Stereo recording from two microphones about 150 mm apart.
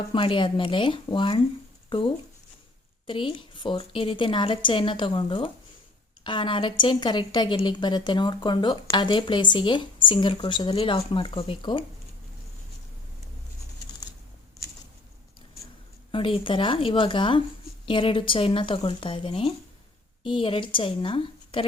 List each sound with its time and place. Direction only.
0.1 s a woman's voice: 35° left (ahead or behind)
16.1 s a woman's voice: 35° left (ahead or behind)